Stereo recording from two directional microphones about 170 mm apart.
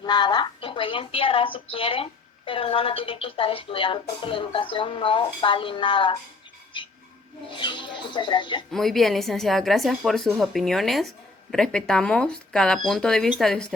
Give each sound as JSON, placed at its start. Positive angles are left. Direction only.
{"t": 0.0, "sound": "speech", "side_deg": 25}
{"t": 7.5, "sound": "speech", "side_deg": 30}
{"t": 8.7, "sound": "a woman's voice", "side_deg": 0}